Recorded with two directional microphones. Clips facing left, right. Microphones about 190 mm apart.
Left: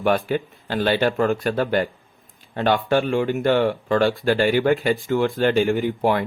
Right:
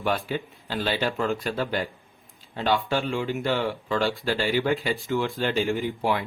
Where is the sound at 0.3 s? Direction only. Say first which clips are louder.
Left 6 dB; 55° left (ahead or behind).